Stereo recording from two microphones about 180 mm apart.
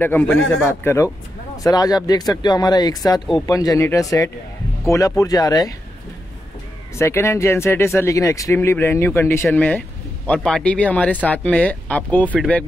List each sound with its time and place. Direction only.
0.0 s speech: 10° left (ahead or behind)
7.0 s speech: 15° left (ahead or behind)